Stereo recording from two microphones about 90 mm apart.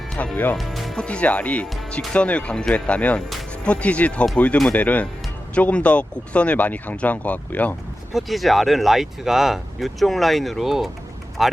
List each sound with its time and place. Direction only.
0.2 s speech: 20° left (ahead or behind)
0.5 s speech: centre (ahead or behind)
1.0 s speech: 15° left (ahead or behind)
8.1 s speech: centre (ahead or behind)